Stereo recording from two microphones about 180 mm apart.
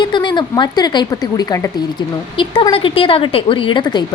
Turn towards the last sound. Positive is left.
turn(degrees=25)  # may be behind; listen again after turning